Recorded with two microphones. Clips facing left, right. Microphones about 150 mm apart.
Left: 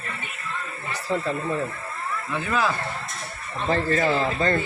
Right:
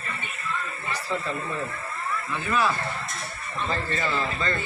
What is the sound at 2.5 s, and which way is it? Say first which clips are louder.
Speech: even; 90° left.